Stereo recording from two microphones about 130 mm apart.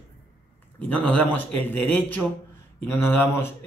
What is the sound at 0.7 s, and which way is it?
Speech, 10° left (ahead or behind).